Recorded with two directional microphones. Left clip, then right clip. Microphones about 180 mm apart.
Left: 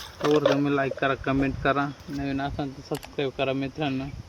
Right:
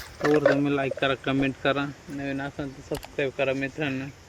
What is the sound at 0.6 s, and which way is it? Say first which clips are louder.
Speech: even; centre (ahead or behind).